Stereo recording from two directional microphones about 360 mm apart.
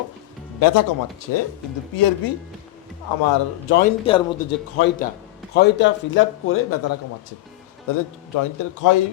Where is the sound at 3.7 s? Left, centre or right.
Left.